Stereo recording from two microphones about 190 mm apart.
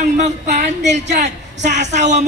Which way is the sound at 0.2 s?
40° right (ahead or behind).